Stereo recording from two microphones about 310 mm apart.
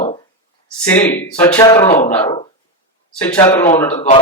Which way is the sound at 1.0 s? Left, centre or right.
Centre.